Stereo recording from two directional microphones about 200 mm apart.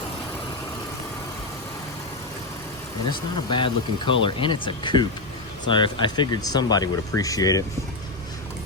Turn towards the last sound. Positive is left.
turn(degrees=15)  # may be behind; listen again after turning